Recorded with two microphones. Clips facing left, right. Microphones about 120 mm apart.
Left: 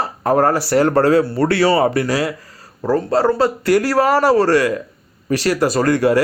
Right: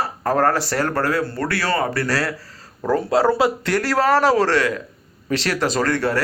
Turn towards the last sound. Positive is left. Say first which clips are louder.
# left 5 dB
turn(degrees=15)  # may be behind; listen again after turning